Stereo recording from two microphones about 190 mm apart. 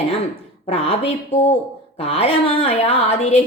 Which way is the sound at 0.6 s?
35° left (ahead or behind).